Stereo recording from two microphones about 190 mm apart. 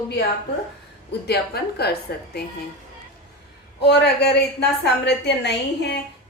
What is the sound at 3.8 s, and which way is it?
A woman's voice, 60° left (ahead or behind).